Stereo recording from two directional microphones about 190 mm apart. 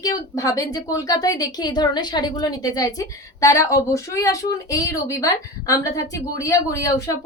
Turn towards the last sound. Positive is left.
turn(degrees=15)  # may be behind; listen again after turning